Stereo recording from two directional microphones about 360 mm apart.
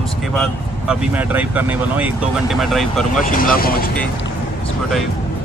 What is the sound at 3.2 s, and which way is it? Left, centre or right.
Speech, left.